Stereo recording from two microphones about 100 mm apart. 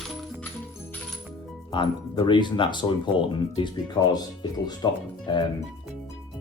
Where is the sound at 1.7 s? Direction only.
50° left (ahead or behind).